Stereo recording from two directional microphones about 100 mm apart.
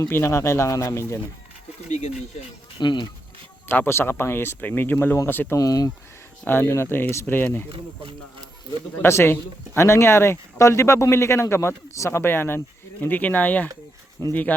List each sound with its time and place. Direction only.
0.1 s speech: 25° left (ahead or behind)
2.7 s speech: 50° left (ahead or behind)
3.7 s speech: 20° left (ahead or behind)
5.5 s speech: 40° left (ahead or behind)
6.5 s speech: 25° left (ahead or behind)
9.0 s speech: 25° left (ahead or behind)
14.2 s speech: 25° left (ahead or behind)